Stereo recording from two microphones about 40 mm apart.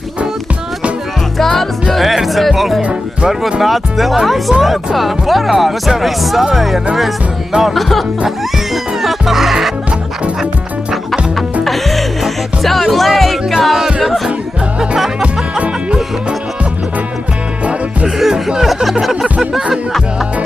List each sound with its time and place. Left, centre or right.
1.4 s music: centre
3.3 s speech: centre
3.6 s speech: centre
9.0 s music: centre
11.6 s music: centre
13.5 s music: centre
18.0 s music: centre
18.6 s speech: centre